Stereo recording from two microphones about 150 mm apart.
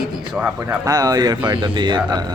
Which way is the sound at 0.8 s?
25° right (ahead or behind).